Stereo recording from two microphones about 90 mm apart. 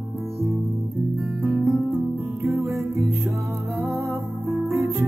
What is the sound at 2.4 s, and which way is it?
Music, 30° right (ahead or behind).